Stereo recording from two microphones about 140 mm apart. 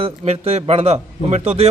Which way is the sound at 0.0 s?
45° right (ahead or behind).